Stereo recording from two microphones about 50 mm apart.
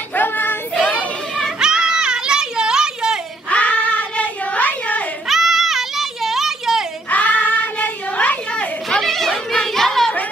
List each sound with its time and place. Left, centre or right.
0.1 s child singing: left
0.7 s child singing: left
1.6 s children playing: centre
3.4 s child singing: left
5.3 s children playing: centre
7.1 s child singing: left
9.0 s a sound: centre